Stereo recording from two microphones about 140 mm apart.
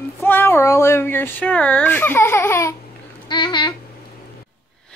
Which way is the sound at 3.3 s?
35° left (ahead or behind).